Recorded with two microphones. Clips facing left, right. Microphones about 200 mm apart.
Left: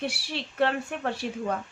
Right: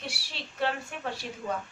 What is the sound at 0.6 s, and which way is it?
Speech, 60° left (ahead or behind).